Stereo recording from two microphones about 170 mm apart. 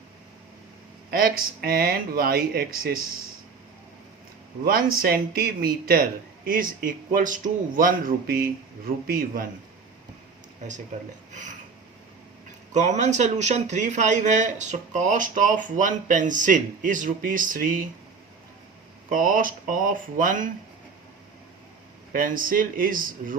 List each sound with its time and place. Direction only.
1.1 s a man's voice: 60° right (ahead or behind)
4.6 s a man's voice: 60° right (ahead or behind)
12.7 s speech: 45° right (ahead or behind)
19.1 s speech: 50° right (ahead or behind)
22.1 s speech: 55° right (ahead or behind)